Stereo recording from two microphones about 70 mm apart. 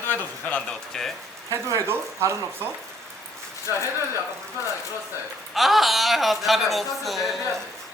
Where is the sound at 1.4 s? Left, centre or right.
Right.